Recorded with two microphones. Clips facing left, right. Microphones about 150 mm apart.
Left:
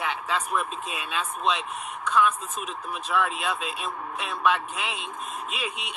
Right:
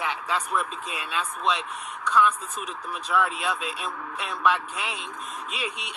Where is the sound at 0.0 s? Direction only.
20° left (ahead or behind).